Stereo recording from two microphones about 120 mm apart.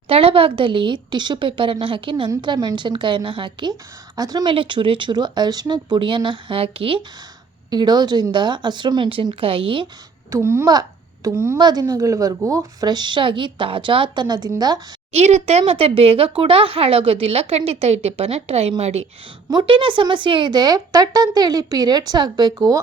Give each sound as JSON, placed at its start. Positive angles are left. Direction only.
{"t": 0.1, "sound": "speech", "side_deg": -50}
{"t": 4.5, "sound": "speech", "side_deg": -45}
{"t": 7.7, "sound": "speech", "side_deg": -35}
{"t": 10.2, "sound": "speech", "side_deg": -25}
{"t": 10.7, "sound": "a child's voice", "side_deg": -35}
{"t": 15.1, "sound": "a woman's voice", "side_deg": -65}
{"t": 19.5, "sound": "speech", "side_deg": -40}